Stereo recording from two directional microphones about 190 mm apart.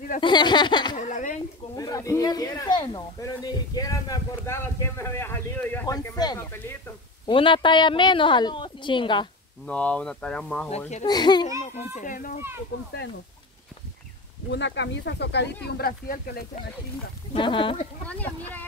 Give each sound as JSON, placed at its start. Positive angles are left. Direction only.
{"t": 0.2, "sound": "speech", "side_deg": 25}
{"t": 0.9, "sound": "a sound", "side_deg": 40}
{"t": 1.8, "sound": "a woman's voice", "side_deg": 15}
{"t": 7.2, "sound": "a woman's voice", "side_deg": 25}
{"t": 9.7, "sound": "speech", "side_deg": 5}
{"t": 11.1, "sound": "a woman's voice", "side_deg": 20}
{"t": 11.7, "sound": "a child's voice", "side_deg": 40}
{"t": 14.5, "sound": "speech", "side_deg": 70}
{"t": 17.3, "sound": "a woman's voice", "side_deg": 25}
{"t": 18.0, "sound": "speech", "side_deg": 10}